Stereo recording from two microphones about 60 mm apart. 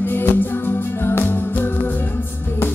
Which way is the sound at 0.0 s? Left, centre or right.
Left.